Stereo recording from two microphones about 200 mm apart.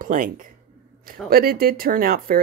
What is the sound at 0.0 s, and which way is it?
Speech, 45° right (ahead or behind).